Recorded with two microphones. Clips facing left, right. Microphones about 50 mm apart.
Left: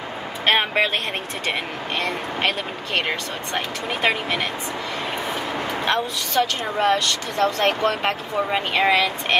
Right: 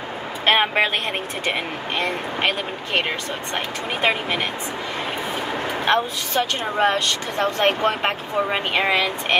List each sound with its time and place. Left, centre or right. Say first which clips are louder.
0.5 s speech: right 1 dB; centre
5.9 s speech: right 4 dB; right